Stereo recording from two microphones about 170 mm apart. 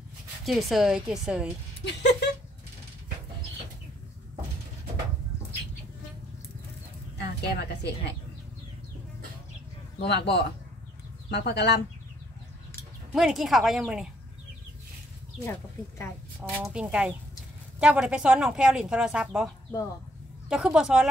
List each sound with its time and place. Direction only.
0.5 s speech: centre (ahead or behind)
1.9 s a sound: 90° left
7.2 s a woman's voice: 80° left
9.9 s a man's voice: 80° left
13.1 s speech: centre (ahead or behind)
16.3 s speech: 10° right (ahead or behind)